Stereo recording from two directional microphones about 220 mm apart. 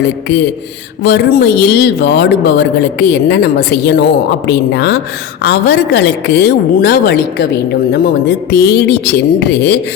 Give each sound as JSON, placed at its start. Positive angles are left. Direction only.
{"t": 0.0, "sound": "a woman's voice", "side_deg": 50}